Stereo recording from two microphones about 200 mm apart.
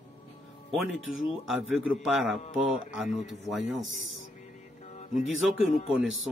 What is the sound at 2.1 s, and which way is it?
Speech, centre (ahead or behind).